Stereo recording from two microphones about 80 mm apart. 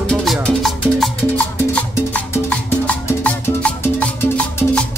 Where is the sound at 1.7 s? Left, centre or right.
Centre.